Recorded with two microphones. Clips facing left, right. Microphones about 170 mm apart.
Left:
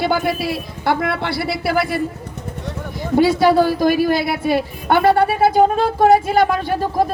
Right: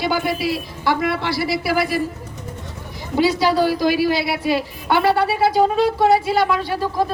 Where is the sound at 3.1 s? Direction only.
55° left (ahead or behind).